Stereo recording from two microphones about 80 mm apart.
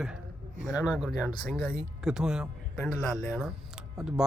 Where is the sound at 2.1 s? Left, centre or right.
Centre.